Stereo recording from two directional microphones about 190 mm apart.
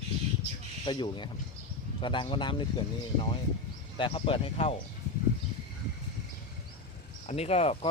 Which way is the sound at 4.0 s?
25° left (ahead or behind).